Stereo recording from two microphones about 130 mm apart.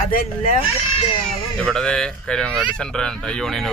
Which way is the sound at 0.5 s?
45° left (ahead or behind).